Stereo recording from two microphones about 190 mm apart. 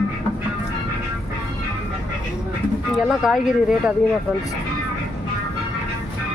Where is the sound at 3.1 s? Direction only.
5° right (ahead or behind).